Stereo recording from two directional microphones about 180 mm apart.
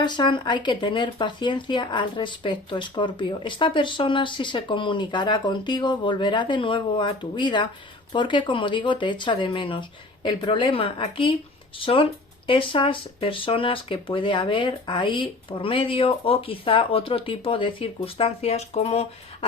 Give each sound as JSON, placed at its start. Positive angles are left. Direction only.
{"t": 0.0, "sound": "speech", "side_deg": 25}